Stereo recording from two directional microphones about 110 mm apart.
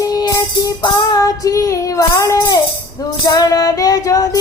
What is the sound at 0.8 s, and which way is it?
Child singing, 30° left (ahead or behind).